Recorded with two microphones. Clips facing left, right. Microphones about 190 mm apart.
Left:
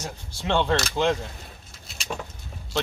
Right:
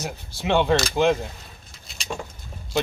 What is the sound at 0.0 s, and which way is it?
Speech, 10° right (ahead or behind).